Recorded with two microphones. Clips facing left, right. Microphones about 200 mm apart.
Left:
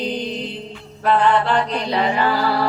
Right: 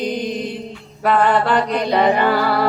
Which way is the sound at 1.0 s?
50° right (ahead or behind).